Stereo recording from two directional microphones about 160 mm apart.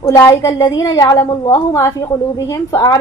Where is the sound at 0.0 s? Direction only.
20° left (ahead or behind).